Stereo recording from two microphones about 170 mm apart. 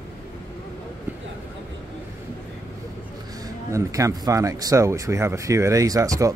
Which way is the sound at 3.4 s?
20° right (ahead or behind).